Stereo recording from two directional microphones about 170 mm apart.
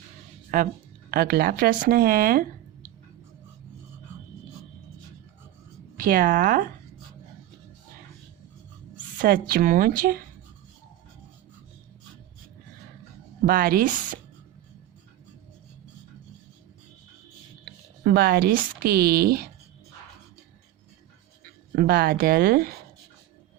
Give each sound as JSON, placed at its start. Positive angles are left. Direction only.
{"t": 0.5, "sound": "speech", "side_deg": -60}
{"t": 6.0, "sound": "speech", "side_deg": -55}
{"t": 9.1, "sound": "speech", "side_deg": -55}
{"t": 13.4, "sound": "speech", "side_deg": -55}
{"t": 18.0, "sound": "speech", "side_deg": -70}
{"t": 21.8, "sound": "speech", "side_deg": -65}